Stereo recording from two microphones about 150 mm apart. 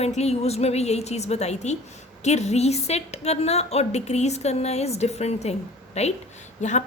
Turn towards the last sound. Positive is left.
turn(degrees=50)  # may be behind; listen again after turning